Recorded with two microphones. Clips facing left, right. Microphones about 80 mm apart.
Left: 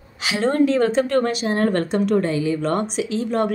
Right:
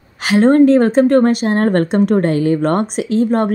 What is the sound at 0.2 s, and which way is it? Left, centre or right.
Speech, right.